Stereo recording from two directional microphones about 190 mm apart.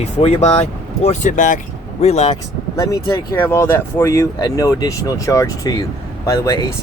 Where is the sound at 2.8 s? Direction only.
15° left (ahead or behind).